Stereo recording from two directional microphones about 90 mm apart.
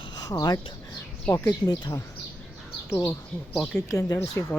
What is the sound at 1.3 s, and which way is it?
Speech, 35° left (ahead or behind).